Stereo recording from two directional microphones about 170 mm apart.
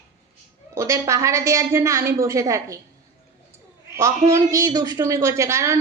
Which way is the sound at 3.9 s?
15° right (ahead or behind).